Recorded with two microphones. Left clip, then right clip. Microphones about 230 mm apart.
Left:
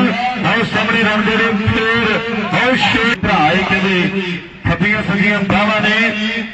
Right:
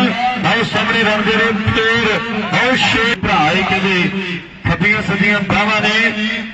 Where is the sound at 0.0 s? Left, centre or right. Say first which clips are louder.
Right 1 dB; right.